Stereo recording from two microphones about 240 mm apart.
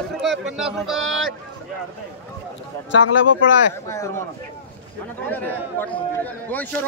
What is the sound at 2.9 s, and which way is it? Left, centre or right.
Speech, left.